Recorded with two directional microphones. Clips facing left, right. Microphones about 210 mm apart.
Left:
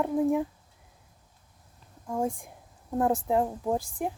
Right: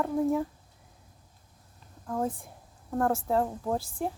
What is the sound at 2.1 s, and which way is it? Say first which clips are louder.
A woman's voice: left 1 dB; 10° left (ahead or behind).